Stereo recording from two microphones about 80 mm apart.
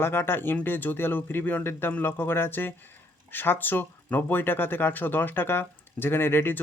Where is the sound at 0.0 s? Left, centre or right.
Left.